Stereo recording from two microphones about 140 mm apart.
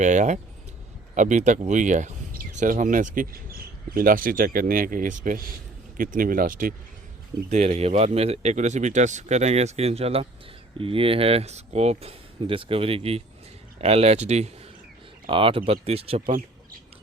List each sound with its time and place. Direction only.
0.0 s speech: 60° right (ahead or behind)
3.9 s speech: 85° right; by 5.5 s 70° right (ahead or behind)
6.0 s speech: 85° right
7.5 s speech: 55° right (ahead or behind)
15.3 s speech: 40° right (ahead or behind)